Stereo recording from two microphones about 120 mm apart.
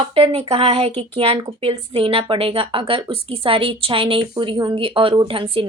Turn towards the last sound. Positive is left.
turn(degrees=-50)  # may be behind; listen again after turning